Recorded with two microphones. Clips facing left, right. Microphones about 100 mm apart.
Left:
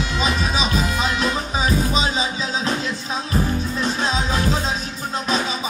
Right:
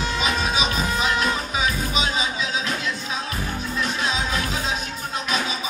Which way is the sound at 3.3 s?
30° left (ahead or behind).